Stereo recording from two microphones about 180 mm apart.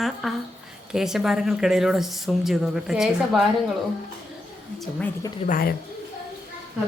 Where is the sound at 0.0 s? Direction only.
Centre (ahead or behind).